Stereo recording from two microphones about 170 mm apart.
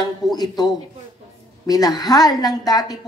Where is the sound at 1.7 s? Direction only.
20° left (ahead or behind).